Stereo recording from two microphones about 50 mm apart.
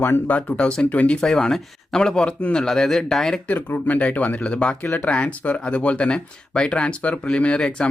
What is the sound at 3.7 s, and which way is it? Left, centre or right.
Speech, left.